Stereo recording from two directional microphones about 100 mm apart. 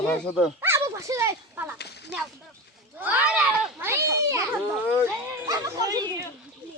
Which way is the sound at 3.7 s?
25° right (ahead or behind).